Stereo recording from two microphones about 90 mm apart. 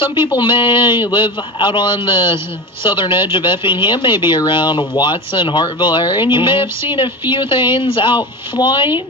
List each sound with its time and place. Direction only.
0.3 s speech: 70° left (ahead or behind)